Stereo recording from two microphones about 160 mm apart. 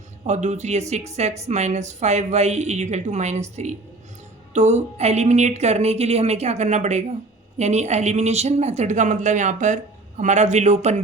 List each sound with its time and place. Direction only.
0.3 s a woman's voice: 45° right (ahead or behind)